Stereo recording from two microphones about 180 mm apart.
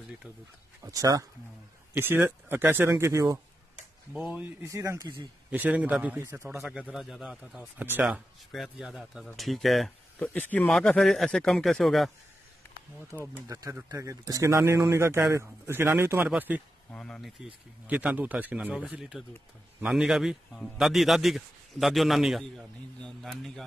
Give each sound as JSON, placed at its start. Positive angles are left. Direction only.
{"t": 0.9, "sound": "a man's voice", "side_deg": -20}
{"t": 5.5, "sound": "a man's voice", "side_deg": -10}
{"t": 6.6, "sound": "a man's voice", "side_deg": -5}
{"t": 13.1, "sound": "a man's voice", "side_deg": -15}
{"t": 16.9, "sound": "a man's voice", "side_deg": 5}
{"t": 17.8, "sound": "a man's voice", "side_deg": -10}